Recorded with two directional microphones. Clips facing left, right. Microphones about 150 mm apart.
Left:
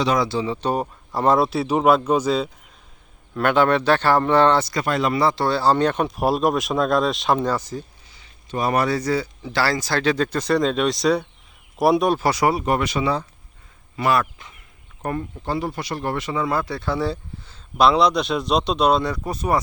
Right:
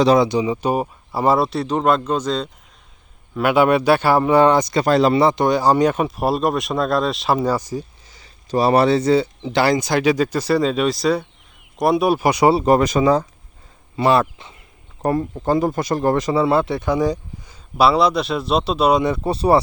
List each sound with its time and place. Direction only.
0.2 s speech: 15° right (ahead or behind); by 2.5 s 5° left (ahead or behind)
3.3 s speech: 10° right (ahead or behind)
4.7 s speech: 30° right (ahead or behind)
5.2 s speech: 20° right (ahead or behind)
8.1 s speech: 40° right (ahead or behind); by 12.5 s 15° right (ahead or behind)
12.5 s speech: 35° right (ahead or behind)
13.9 s speech: 30° right (ahead or behind); by 19.0 s 10° right (ahead or behind)
19.0 s speech: 25° right (ahead or behind)